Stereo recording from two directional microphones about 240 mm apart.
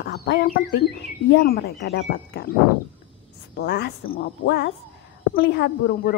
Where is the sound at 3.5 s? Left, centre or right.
Left.